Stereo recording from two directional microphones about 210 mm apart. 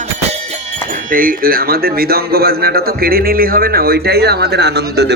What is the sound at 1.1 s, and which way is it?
A man's voice, 40° right (ahead or behind).